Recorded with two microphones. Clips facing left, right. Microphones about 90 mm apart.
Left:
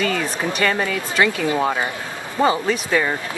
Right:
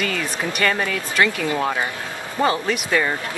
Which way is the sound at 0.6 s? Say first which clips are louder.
Even; 10° left (ahead or behind).